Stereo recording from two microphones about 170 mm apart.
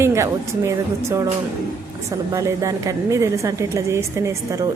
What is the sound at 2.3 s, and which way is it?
Speech, 20° right (ahead or behind).